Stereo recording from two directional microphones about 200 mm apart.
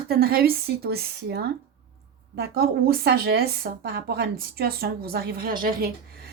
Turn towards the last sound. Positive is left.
turn(degrees=-50)  # may be behind; listen again after turning